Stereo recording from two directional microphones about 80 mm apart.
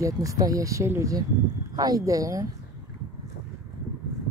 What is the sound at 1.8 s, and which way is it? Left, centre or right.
Speech, right.